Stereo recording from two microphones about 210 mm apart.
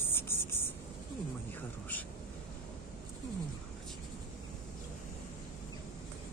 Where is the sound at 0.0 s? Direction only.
10° left (ahead or behind).